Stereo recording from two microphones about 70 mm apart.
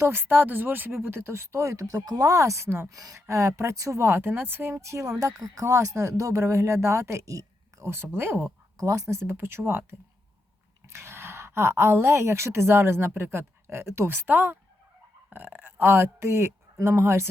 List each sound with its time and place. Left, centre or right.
0.0 s speech: right
2.9 s speech: right
4.0 s speech: right
8.8 s speech: right
10.8 s a woman's voice: right